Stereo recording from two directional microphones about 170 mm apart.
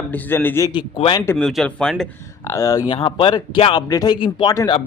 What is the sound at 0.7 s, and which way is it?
Speech, 30° left (ahead or behind).